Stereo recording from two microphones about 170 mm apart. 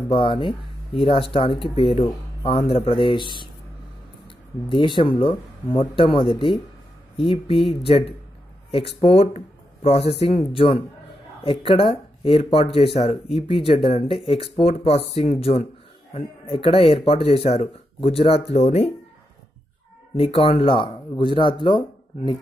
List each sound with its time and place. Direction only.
0.1 s speech: 30° left (ahead or behind)
4.6 s speech: 30° left (ahead or behind)
20.2 s speech: 35° left (ahead or behind)